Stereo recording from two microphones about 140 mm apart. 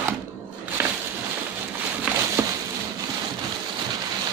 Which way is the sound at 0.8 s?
15° right (ahead or behind).